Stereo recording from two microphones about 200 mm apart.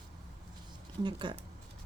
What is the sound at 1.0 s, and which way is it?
Speech, 25° right (ahead or behind).